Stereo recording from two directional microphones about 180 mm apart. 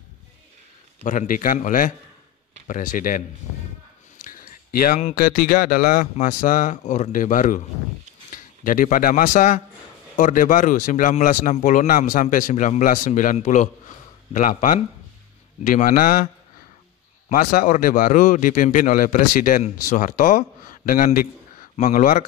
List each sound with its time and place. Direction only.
1.0 s speech: 45° left (ahead or behind)
4.2 s a sound: 50° left (ahead or behind)
5.1 s speech: 50° left (ahead or behind)
8.6 s speech: 50° left (ahead or behind)
17.3 s speech: 50° left (ahead or behind)